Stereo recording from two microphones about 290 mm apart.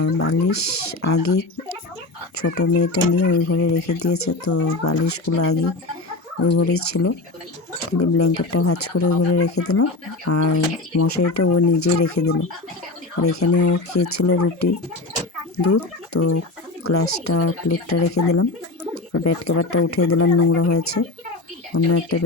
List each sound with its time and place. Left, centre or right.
0.0 s speech: left
5.2 s speech: left
13.2 s speech: left
21.7 s speech: left